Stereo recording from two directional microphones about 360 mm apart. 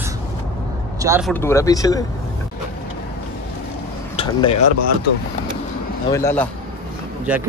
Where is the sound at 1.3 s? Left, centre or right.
Centre.